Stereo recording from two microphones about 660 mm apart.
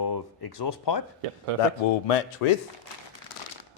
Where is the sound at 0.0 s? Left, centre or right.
Left.